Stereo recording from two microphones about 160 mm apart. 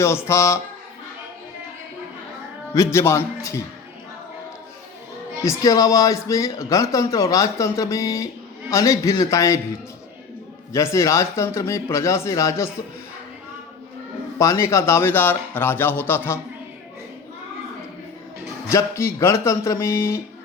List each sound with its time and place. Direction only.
0.3 s speech: 20° left (ahead or behind)
2.7 s speech: 15° left (ahead or behind)
5.4 s speech: 20° left (ahead or behind)
10.7 s speech: 20° left (ahead or behind)
14.3 s speech: 20° left (ahead or behind)
18.7 s speech: 15° left (ahead or behind)